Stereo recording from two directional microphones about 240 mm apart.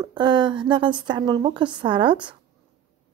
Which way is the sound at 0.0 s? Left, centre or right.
Centre.